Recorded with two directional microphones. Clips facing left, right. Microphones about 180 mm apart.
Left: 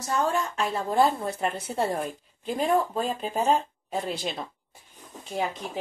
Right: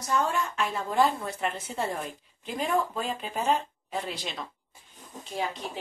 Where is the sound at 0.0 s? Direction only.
35° left (ahead or behind).